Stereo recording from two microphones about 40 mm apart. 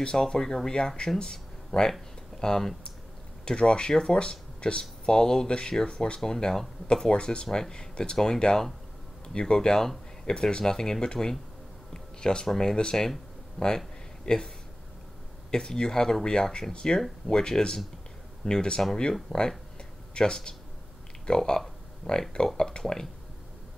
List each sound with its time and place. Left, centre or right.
0.0 s speech: centre
6.9 s speech: left
11.9 s a sound: centre
12.5 s speech: centre
13.6 s a sound: centre
15.5 s speech: centre
19.3 s speech: centre
20.2 s speech: centre
21.3 s a sound: centre
22.6 s speech: centre